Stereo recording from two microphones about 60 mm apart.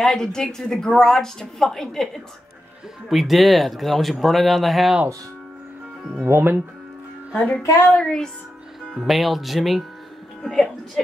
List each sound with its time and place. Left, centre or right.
0.0 s speech: centre
3.1 s speech: centre
6.2 s speech: right
7.3 s speech: centre
8.9 s speech: centre